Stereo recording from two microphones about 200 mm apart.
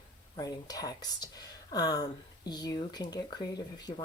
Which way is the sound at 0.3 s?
20° left (ahead or behind).